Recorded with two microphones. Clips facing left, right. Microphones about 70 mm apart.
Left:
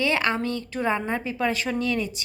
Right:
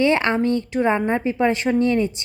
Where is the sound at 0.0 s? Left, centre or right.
Right.